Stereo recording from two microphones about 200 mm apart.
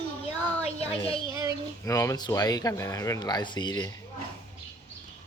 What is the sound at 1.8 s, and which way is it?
Speech, 15° left (ahead or behind).